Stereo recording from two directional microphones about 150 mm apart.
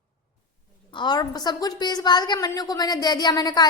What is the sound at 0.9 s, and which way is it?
A woman's voice, 30° left (ahead or behind).